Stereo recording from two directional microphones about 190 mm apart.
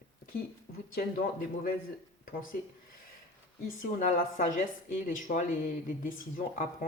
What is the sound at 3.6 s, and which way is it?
A woman's voice, 45° left (ahead or behind).